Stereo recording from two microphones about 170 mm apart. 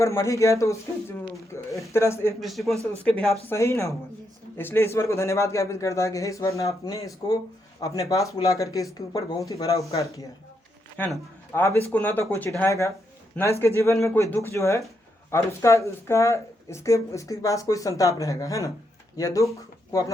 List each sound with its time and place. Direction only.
0.0 s a man's voice: 15° left (ahead or behind)
2.4 s a man's voice: centre (ahead or behind)
3.5 s a man's voice: 15° left (ahead or behind)
10.9 s a man's voice: 10° left (ahead or behind)